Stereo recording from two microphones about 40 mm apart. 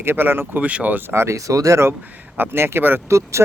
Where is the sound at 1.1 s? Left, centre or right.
Right.